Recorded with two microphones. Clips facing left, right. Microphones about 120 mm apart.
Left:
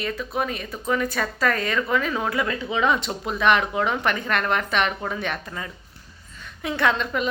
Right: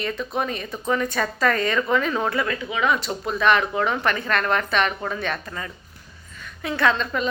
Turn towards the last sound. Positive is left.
turn(degrees=15)  # may be behind; listen again after turning